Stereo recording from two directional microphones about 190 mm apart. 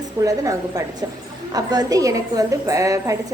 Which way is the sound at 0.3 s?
20° right (ahead or behind).